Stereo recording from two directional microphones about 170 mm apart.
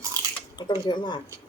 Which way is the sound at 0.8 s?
25° left (ahead or behind).